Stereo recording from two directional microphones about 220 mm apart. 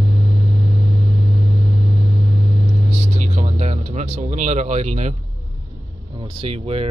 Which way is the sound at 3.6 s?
30° right (ahead or behind).